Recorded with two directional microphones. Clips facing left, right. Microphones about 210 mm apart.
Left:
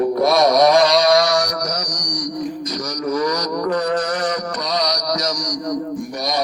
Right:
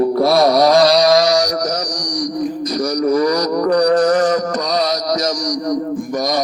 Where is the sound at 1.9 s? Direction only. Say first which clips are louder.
Right 5 dB; 30° right (ahead or behind).